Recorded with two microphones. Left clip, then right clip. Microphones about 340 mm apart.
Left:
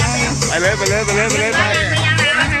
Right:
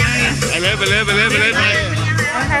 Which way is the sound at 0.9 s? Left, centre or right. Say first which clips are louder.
Right 2 dB; centre.